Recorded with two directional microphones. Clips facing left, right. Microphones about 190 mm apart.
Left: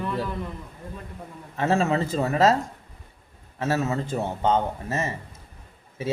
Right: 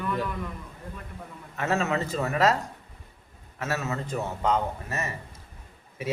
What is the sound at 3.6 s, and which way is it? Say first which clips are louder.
A woman's voice: left 5 dB; 30° left (ahead or behind).